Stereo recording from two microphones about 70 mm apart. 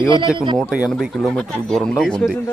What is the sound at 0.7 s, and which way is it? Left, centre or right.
Speech, centre.